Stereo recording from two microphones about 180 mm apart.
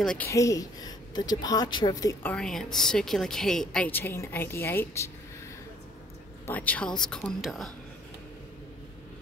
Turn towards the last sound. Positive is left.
turn(degrees=0)  # may be behind; listen again after turning